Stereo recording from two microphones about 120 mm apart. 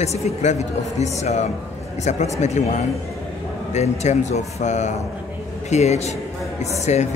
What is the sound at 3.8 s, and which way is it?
Speech, 70° left (ahead or behind).